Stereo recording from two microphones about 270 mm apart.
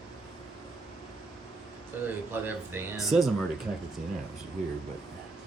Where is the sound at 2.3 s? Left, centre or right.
Centre.